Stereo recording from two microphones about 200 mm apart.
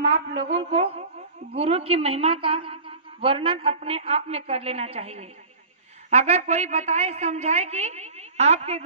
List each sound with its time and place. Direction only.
0.3 s a woman's voice: 65° right (ahead or behind)
0.6 s a woman's voice: 30° right (ahead or behind)